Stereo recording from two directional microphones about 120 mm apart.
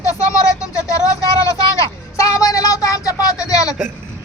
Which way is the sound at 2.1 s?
25° left (ahead or behind).